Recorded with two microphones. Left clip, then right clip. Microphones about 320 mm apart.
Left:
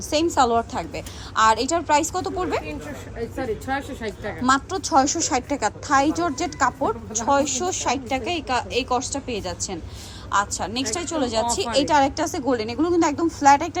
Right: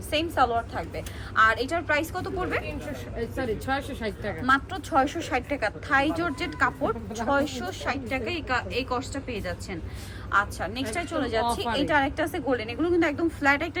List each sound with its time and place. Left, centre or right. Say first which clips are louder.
0.1 s a woman's voice: left 5 dB; centre
3.3 s a woman's voice: left 2 dB; centre
4.4 s a woman's voice: left 4 dB; centre